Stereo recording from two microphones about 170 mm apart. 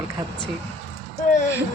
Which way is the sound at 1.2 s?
45° left (ahead or behind).